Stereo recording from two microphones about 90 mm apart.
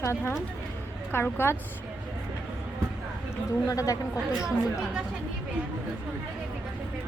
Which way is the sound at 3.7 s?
40° left (ahead or behind).